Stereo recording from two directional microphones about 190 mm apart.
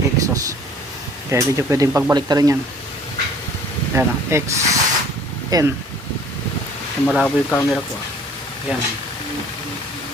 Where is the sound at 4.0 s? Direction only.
15° right (ahead or behind).